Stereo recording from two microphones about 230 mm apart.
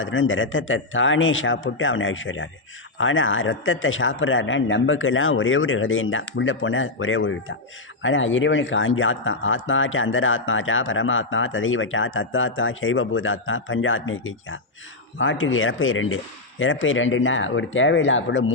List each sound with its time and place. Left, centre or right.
0.0 s a man's voice: left